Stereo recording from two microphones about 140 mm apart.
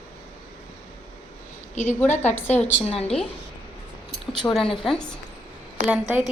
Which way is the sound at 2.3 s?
10° left (ahead or behind).